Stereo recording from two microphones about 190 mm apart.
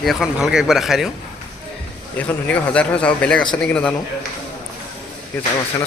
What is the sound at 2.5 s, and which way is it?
Speech, 5° left (ahead or behind).